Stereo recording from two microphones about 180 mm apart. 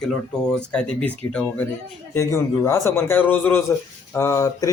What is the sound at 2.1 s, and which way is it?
A man's voice, 15° left (ahead or behind).